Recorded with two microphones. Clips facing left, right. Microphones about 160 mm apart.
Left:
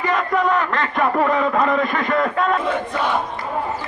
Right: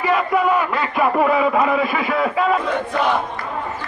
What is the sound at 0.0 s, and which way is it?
A man's voice, 5° right (ahead or behind).